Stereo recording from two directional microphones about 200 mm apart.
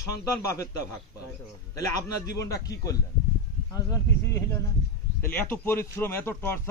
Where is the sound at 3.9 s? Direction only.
15° left (ahead or behind).